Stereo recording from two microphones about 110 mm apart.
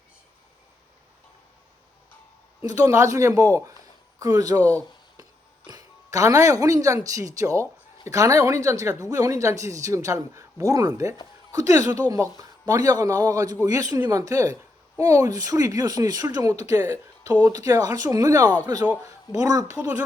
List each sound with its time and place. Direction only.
2.6 s speech: 30° right (ahead or behind)
5.6 s speech: 35° right (ahead or behind)
19.7 s speech: 10° right (ahead or behind)